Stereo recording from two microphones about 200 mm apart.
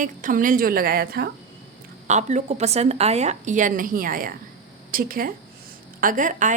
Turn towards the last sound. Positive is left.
turn(degrees=-40)  # may be behind; listen again after turning